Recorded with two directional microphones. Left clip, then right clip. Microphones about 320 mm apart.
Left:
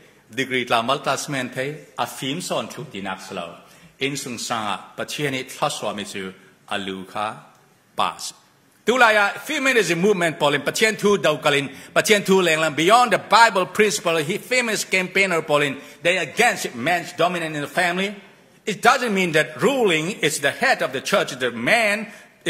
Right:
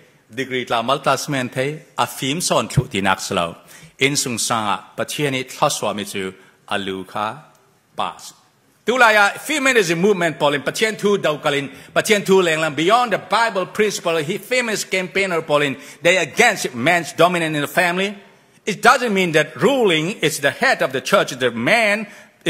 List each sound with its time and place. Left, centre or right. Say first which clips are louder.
0.4 s a man's voice: even; centre
7.9 s a man's voice: left 2 dB; centre